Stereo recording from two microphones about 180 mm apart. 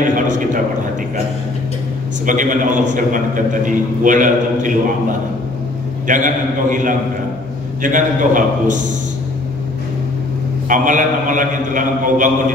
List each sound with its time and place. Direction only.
0.0 s a sound: 45° right (ahead or behind)
2.2 s a man's voice: 45° right (ahead or behind)
6.0 s a man's voice: 45° right (ahead or behind)
10.7 s a man's voice: 45° right (ahead or behind)